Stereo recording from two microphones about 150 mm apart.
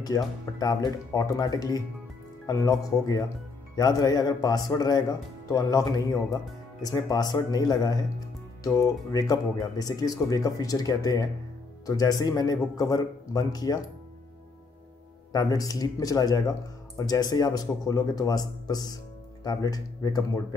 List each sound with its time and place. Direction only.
0.0 s speech: 25° left (ahead or behind)
15.3 s speech: 25° left (ahead or behind)